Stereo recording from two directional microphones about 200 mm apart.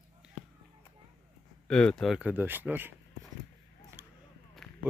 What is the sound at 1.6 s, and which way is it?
Speech, 5° left (ahead or behind).